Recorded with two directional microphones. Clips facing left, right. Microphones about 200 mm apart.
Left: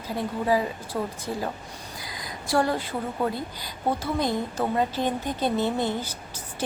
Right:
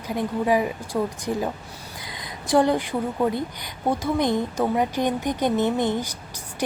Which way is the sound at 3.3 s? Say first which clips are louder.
Right 5 dB; 15° right (ahead or behind).